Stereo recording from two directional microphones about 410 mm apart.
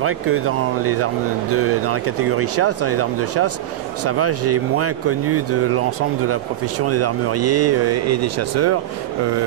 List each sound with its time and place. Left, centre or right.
0.0 s speech: right